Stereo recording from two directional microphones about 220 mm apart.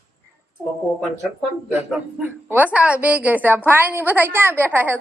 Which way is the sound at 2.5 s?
5° right (ahead or behind).